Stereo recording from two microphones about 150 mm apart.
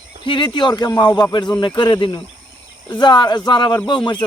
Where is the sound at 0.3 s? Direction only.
30° left (ahead or behind).